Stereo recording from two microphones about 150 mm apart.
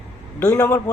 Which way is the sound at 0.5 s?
10° left (ahead or behind).